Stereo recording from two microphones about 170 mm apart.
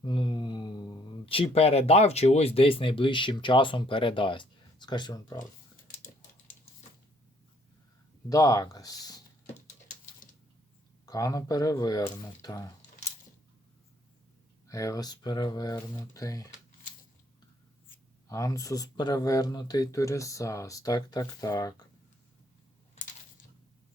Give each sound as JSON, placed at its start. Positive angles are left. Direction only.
{"t": 0.0, "sound": "speech", "side_deg": 30}
{"t": 8.3, "sound": "a sound", "side_deg": 20}
{"t": 11.0, "sound": "speech", "side_deg": 20}
{"t": 14.7, "sound": "speech", "side_deg": 20}
{"t": 18.3, "sound": "speech", "side_deg": 20}